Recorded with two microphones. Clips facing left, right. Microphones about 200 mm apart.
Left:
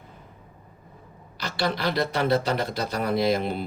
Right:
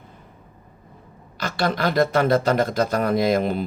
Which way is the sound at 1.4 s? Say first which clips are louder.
Right 4 dB; 50° right (ahead or behind).